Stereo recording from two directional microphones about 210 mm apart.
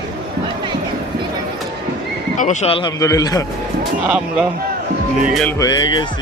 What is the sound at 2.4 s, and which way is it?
Speech, 30° left (ahead or behind).